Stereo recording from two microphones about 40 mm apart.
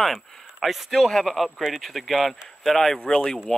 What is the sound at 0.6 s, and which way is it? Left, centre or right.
Speech, centre.